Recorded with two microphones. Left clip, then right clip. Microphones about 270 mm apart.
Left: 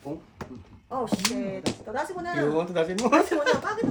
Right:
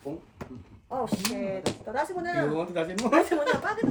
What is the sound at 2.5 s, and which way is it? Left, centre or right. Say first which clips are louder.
Speech: left 4 dB; left.